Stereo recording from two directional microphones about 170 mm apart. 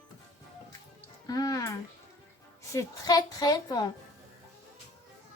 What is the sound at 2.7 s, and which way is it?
A woman's voice, 20° left (ahead or behind).